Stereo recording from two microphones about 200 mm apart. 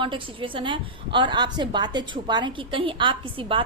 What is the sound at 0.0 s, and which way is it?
A woman's voice, 25° right (ahead or behind).